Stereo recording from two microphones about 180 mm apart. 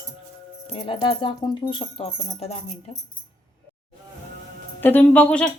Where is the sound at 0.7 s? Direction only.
30° left (ahead or behind).